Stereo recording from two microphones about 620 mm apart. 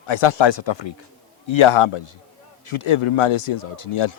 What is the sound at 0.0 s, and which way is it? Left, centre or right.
Speech, left.